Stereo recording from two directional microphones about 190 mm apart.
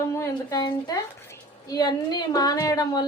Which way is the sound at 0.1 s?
20° left (ahead or behind).